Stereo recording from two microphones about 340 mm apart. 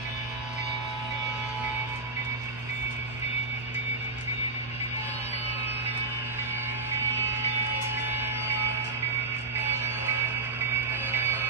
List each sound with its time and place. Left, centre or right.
11.1 s music: centre